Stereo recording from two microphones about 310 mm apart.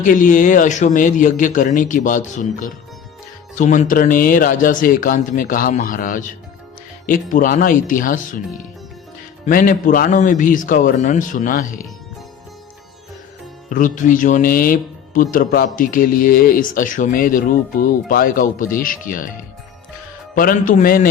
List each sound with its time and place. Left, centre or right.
0.0 s speech: left
9.5 s speech: left
13.7 s speech: left
20.3 s speech: left